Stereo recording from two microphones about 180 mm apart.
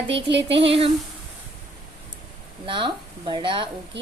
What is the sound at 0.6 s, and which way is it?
Speech, 30° right (ahead or behind).